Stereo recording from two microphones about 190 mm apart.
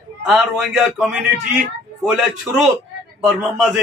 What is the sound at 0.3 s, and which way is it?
Speech, centre (ahead or behind).